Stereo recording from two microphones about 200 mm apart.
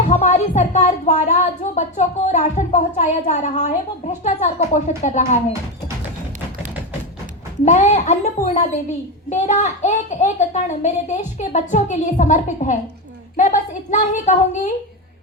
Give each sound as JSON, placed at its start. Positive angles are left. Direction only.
{"t": 0.0, "sound": "speech", "side_deg": 35}
{"t": 7.6, "sound": "speech", "side_deg": 35}